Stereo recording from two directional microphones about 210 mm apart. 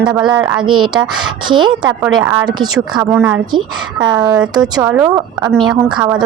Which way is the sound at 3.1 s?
5° right (ahead or behind).